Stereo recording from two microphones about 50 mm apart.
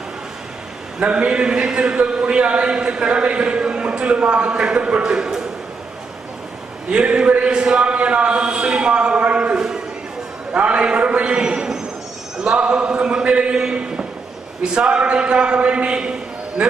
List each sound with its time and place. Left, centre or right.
0.9 s a man's voice: right
6.9 s a man's voice: centre
12.5 s a sound: right
14.6 s a man's voice: centre